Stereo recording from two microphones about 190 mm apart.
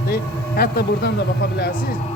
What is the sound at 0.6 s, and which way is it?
Speech, 55° left (ahead or behind).